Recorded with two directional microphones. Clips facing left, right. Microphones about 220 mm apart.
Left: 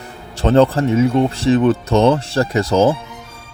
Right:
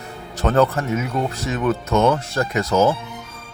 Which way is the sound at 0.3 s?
25° left (ahead or behind).